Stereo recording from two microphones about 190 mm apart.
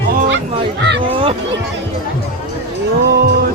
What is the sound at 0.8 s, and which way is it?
Speech, 65° right (ahead or behind).